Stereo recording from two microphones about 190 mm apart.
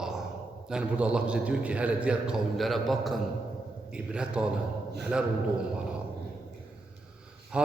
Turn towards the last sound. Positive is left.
turn(degrees=-5)  # may be behind; listen again after turning